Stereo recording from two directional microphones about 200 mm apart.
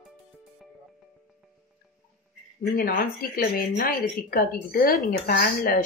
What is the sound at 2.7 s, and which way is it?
A woman's voice, 45° left (ahead or behind).